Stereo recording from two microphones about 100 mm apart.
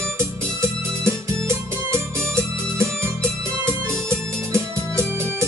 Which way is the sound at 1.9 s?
30° right (ahead or behind).